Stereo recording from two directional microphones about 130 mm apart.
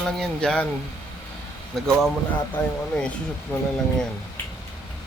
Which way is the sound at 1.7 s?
Centre (ahead or behind).